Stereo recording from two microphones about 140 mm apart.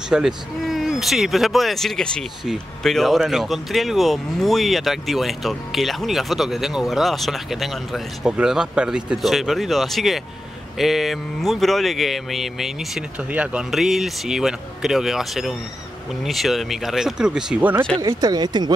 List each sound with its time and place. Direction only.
0.1 s speech: 5° right (ahead or behind)
18.0 s speech: 30° right (ahead or behind)